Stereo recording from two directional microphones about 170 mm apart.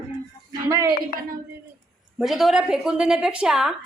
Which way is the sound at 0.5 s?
20° right (ahead or behind).